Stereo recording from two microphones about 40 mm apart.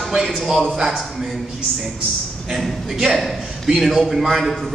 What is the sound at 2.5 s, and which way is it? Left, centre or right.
A man's voice, centre.